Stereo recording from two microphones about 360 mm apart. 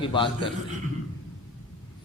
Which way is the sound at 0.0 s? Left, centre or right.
Centre.